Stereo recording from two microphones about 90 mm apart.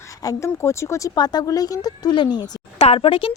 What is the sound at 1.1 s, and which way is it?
Speech, 50° left (ahead or behind).